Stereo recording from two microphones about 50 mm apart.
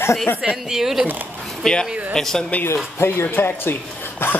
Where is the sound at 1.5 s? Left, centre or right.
Centre.